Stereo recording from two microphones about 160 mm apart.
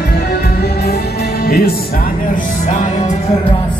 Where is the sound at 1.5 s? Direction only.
70° left (ahead or behind).